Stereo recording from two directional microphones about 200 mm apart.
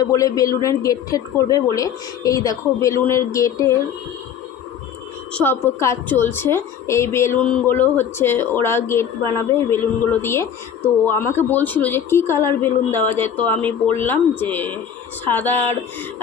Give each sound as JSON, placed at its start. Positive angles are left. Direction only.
{"t": 0.0, "sound": "a woman's voice", "side_deg": 15}
{"t": 5.3, "sound": "a woman's voice", "side_deg": 10}